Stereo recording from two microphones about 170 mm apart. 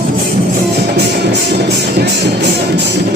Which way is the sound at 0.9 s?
80° right.